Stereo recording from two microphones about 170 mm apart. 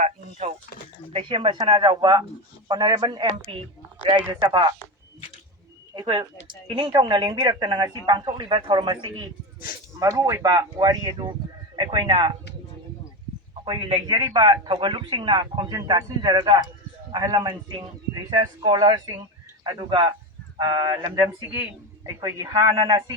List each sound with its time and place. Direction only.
0.0 s a man's voice: 40° right (ahead or behind)
5.9 s a man's voice: 25° right (ahead or behind)
13.7 s a man's voice: 25° right (ahead or behind)